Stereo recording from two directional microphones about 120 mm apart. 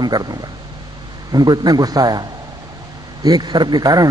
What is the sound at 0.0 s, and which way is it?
A man's voice, 35° right (ahead or behind).